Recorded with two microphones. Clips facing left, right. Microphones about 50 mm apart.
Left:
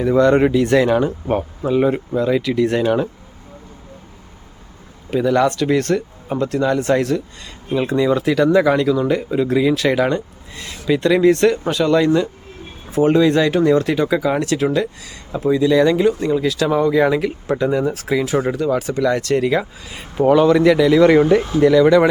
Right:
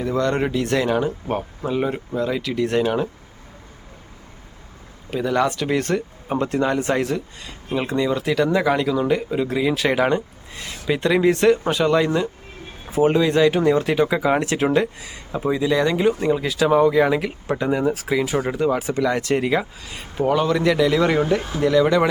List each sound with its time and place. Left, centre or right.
0.0 s speech: centre
5.1 s speech: centre
6.4 s speech: right; by 17.6 s centre
17.6 s speech: centre
18.5 s speech: centre
19.8 s speech: centre